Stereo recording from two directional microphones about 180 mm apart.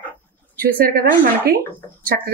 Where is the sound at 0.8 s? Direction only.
55° right (ahead or behind).